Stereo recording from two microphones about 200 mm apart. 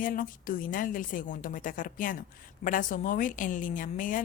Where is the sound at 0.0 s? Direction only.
45° left (ahead or behind).